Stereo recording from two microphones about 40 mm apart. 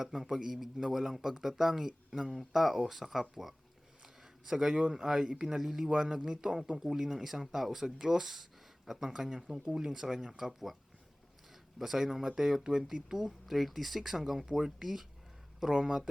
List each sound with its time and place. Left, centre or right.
0.0 s speech: centre
4.0 s a sound: centre
4.9 s speech: centre
11.8 s speech: centre
13.4 s speech: centre